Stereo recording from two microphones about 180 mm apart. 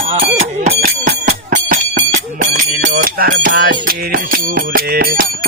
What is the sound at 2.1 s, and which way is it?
Bicycle bell, 50° right (ahead or behind).